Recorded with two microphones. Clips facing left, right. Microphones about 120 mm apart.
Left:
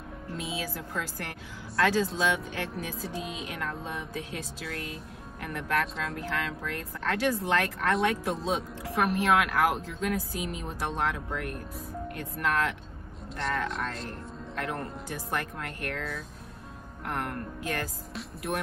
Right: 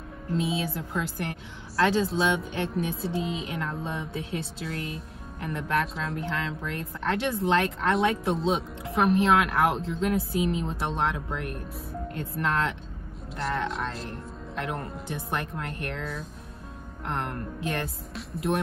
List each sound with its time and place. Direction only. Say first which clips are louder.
0.4 s speech: right 6 dB; 25° right (ahead or behind)